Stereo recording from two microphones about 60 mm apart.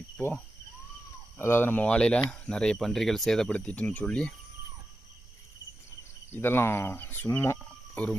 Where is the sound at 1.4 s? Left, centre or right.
Left.